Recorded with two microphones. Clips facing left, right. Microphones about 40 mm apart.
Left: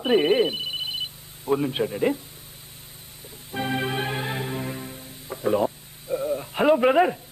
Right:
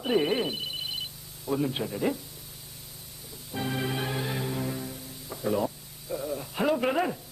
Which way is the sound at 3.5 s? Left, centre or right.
Left.